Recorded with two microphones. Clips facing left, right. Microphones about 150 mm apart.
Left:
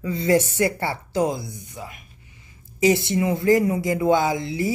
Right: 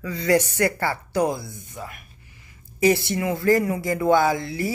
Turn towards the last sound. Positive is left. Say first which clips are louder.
# even
turn(degrees=20)  # may be behind; listen again after turning